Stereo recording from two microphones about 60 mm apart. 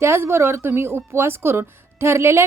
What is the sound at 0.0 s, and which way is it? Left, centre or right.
A woman's voice, right.